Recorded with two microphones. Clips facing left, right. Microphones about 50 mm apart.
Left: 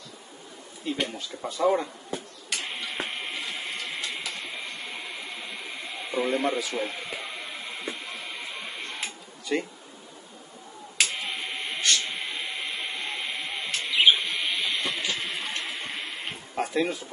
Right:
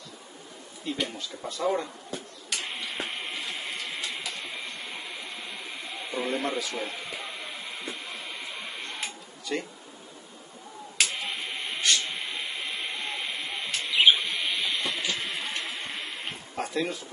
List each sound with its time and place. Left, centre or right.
0.9 s speech: centre
2.5 s printer: centre
6.0 s a sound: centre
9.5 s speech: centre
11.0 s a sound: centre
16.7 s speech: centre